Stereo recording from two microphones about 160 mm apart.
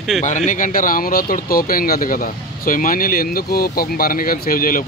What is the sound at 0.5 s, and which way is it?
Speech, 55° left (ahead or behind).